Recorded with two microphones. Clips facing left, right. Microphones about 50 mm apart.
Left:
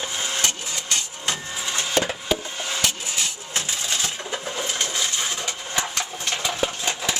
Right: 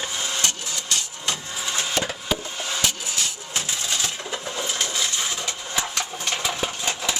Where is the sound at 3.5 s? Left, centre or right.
Centre.